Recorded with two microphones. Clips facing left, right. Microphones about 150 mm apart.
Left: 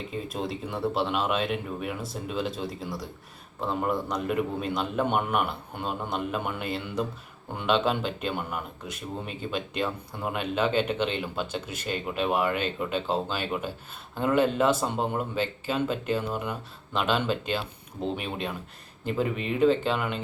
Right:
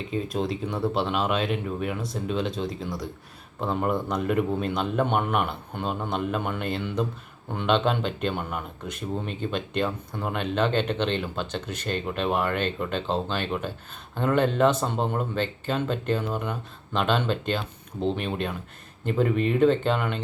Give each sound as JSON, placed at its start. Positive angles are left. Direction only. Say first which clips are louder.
{"t": 0.1, "sound": "speech", "louder": "right 6 dB", "side_deg": 0}